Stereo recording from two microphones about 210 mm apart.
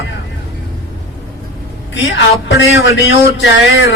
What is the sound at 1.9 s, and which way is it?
A man's voice, 60° left (ahead or behind).